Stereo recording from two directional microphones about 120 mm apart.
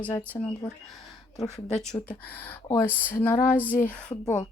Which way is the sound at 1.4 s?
Centre (ahead or behind).